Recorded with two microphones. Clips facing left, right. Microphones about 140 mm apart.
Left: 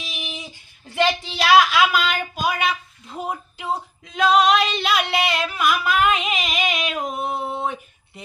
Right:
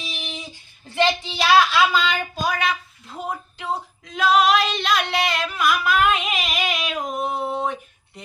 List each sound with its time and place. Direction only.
0.9 s speech: 5° left (ahead or behind)
2.6 s female singing: centre (ahead or behind)